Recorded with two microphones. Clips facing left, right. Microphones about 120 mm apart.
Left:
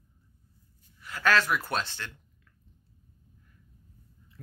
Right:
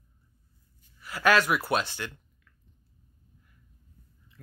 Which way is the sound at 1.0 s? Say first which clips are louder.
Right 2 dB; 10° right (ahead or behind).